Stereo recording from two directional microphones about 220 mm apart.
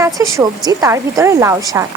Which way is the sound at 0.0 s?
15° right (ahead or behind).